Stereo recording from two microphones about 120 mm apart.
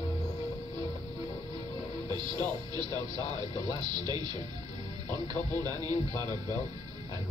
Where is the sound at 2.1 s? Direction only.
40° right (ahead or behind).